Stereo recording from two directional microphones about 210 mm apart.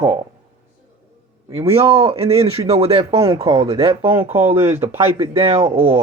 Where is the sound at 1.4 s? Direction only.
25° right (ahead or behind).